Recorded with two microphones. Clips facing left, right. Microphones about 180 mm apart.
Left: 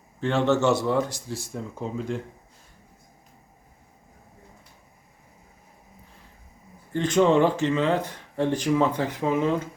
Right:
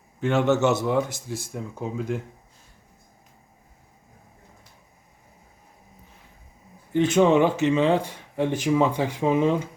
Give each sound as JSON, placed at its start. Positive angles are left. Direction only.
{"t": 0.2, "sound": "speech", "side_deg": -15}
{"t": 1.4, "sound": "speech", "side_deg": 0}
{"t": 6.9, "sound": "speech", "side_deg": -10}